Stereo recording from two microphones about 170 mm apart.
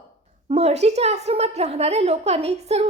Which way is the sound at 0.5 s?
40° right (ahead or behind).